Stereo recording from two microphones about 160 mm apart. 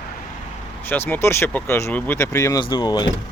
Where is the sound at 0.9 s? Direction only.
15° left (ahead or behind).